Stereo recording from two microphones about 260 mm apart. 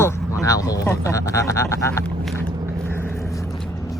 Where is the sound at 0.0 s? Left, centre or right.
Centre.